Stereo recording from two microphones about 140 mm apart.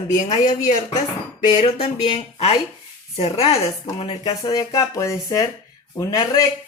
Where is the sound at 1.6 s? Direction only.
40° left (ahead or behind).